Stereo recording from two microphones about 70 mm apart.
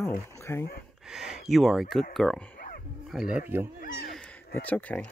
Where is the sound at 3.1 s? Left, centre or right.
Centre.